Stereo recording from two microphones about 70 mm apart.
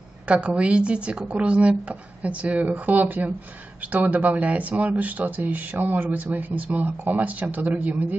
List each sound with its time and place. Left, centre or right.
0.3 s speech: centre